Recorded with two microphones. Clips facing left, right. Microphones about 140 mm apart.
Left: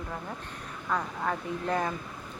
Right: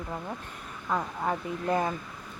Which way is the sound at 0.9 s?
15° right (ahead or behind).